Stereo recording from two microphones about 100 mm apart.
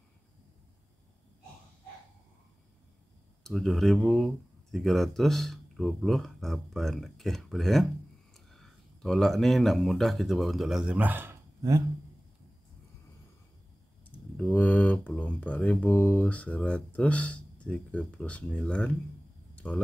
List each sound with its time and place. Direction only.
3.4 s speech: 5° left (ahead or behind)
11.0 s speech: 20° right (ahead or behind)
14.3 s speech: 15° left (ahead or behind)
19.5 s a sound: 15° left (ahead or behind)